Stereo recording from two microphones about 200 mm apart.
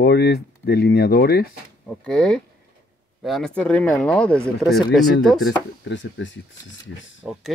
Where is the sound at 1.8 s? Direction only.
5° left (ahead or behind).